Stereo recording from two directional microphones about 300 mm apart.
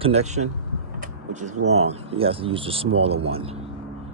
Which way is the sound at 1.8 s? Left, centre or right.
Centre.